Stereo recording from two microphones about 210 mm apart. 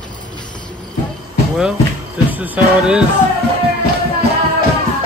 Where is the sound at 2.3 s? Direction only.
10° right (ahead or behind).